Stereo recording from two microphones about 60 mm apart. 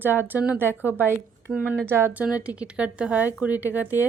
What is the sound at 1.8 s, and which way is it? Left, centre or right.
Speech, right.